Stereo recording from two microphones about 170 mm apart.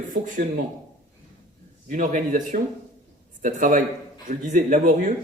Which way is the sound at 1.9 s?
50° right (ahead or behind).